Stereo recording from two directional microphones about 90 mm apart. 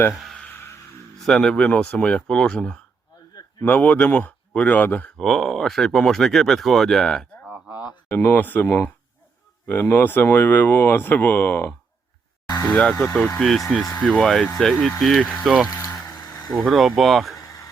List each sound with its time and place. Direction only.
0.1 s speech: 5° right (ahead or behind)
1.2 s speech: 5° left (ahead or behind)
5.1 s speech: 5° left (ahead or behind)
8.0 s speech: 20° left (ahead or behind)
12.6 s speech: 5° left (ahead or behind)
15.7 s vehicle: 40° left (ahead or behind)
16.5 s speech: centre (ahead or behind)
17.3 s a sound: 40° left (ahead or behind)